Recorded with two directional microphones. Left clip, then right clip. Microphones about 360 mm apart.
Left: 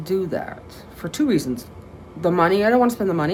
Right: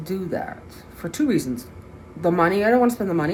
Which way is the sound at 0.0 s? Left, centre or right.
Centre.